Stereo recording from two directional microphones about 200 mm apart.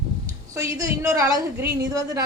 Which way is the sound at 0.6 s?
15° right (ahead or behind).